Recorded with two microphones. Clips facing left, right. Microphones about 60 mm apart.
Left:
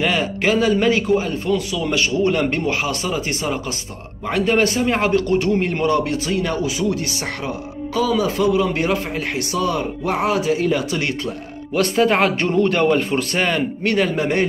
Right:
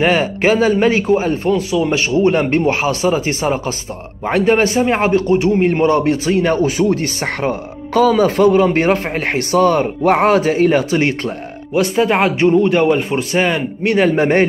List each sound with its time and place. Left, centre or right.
0.0 s a man's voice: right
11.7 s a man's voice: centre
13.9 s a man's voice: right